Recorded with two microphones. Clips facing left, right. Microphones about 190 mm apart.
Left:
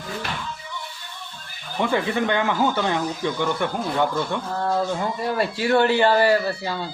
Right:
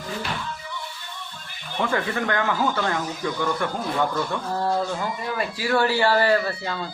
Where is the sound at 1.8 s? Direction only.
15° left (ahead or behind).